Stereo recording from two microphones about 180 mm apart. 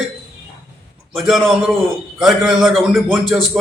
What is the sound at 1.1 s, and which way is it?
A man's voice, 5° right (ahead or behind).